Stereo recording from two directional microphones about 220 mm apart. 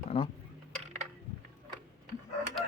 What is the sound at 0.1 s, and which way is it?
Speech, 25° left (ahead or behind).